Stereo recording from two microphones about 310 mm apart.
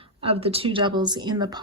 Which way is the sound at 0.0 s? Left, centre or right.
Centre.